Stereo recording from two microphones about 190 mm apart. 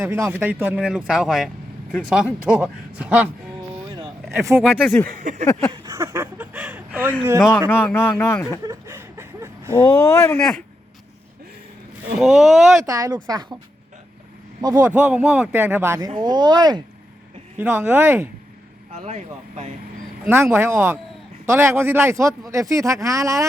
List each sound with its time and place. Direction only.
0.0 s speech: 10° right (ahead or behind)
4.3 s speech: centre (ahead or behind)
5.0 s a sound: 40° right (ahead or behind)
5.7 s speech: 20° right (ahead or behind)
7.7 s speech: 10° left (ahead or behind)
8.6 s a sound: 15° right (ahead or behind)
9.8 s speech: 20° left (ahead or behind)
10.3 s speech: centre (ahead or behind)
12.2 s speech: 5° right (ahead or behind)
12.8 s speech: 15° right (ahead or behind)
14.6 s speech: 15° right (ahead or behind)
17.6 s speech: 10° right (ahead or behind)
18.9 s speech: 35° right (ahead or behind)
20.2 s speech: 10° right (ahead or behind)